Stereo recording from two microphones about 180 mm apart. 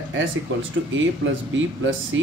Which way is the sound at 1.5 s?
90° right.